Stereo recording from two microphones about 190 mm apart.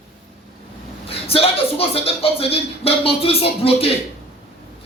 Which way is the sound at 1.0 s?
30° left (ahead or behind).